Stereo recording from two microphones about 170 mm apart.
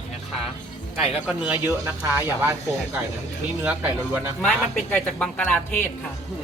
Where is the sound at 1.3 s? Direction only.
5° right (ahead or behind).